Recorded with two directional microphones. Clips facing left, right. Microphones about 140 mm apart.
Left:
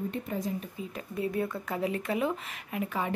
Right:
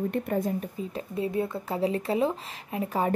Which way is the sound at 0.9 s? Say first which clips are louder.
Right 2 dB; 25° right (ahead or behind).